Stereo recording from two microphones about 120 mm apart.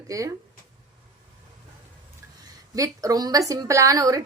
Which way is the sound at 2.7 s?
30° right (ahead or behind).